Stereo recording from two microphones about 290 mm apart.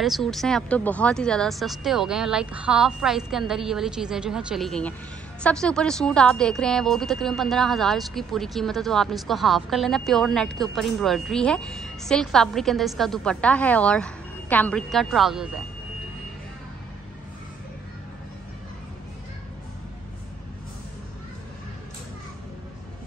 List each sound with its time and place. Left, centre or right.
0.0 s a woman's voice: centre